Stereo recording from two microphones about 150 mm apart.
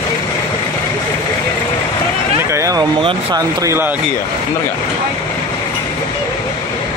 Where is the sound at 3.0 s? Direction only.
35° right (ahead or behind); by 4.0 s 15° right (ahead or behind).